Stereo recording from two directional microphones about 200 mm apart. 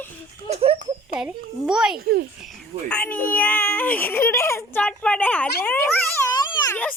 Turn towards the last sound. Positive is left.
turn(degrees=10)  # may be behind; listen again after turning